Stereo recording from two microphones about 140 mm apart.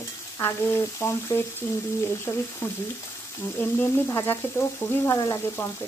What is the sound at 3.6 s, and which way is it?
Frying, 15° left (ahead or behind).